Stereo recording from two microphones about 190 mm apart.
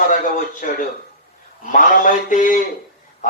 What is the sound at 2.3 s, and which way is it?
Speech, 45° left (ahead or behind).